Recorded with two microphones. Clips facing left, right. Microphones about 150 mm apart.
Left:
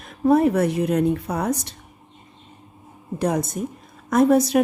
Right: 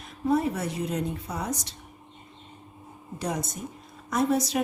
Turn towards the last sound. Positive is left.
turn(degrees=55)  # may be behind; listen again after turning